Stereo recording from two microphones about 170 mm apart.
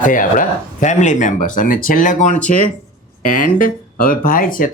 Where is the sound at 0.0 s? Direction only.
50° left (ahead or behind).